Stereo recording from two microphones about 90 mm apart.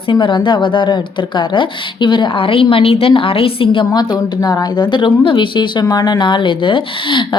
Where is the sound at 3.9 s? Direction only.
45° left (ahead or behind).